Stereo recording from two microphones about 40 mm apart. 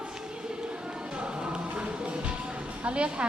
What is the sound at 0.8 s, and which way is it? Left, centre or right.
Music, right.